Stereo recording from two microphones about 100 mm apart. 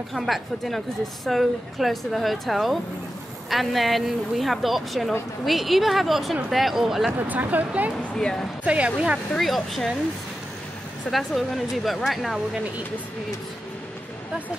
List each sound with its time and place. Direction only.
0.1 s a woman's voice: centre (ahead or behind)
7.2 s speech: 15° right (ahead or behind)
8.1 s speech: 5° left (ahead or behind)
8.6 s speech: 10° right (ahead or behind)
9.3 s a woman's voice: centre (ahead or behind)
11.1 s a woman's voice: centre (ahead or behind)